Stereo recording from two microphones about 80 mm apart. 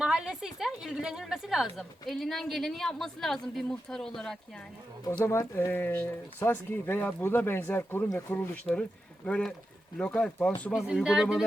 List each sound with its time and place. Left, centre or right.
0.0 s a sound: centre
0.9 s speech: centre
5.5 s speech: left
8.7 s speech: centre
10.8 s speech: centre